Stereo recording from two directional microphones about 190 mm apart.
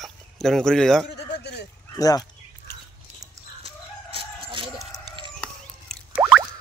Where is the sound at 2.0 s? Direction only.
20° left (ahead or behind).